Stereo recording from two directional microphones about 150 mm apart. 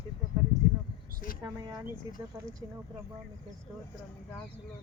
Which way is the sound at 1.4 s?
20° right (ahead or behind).